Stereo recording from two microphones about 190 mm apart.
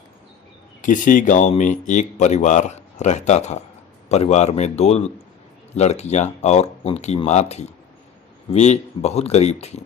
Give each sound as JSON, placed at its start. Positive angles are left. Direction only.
{"t": 0.8, "sound": "speech", "side_deg": 45}